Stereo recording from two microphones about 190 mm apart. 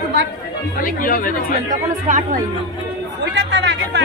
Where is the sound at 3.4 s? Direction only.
65° right (ahead or behind).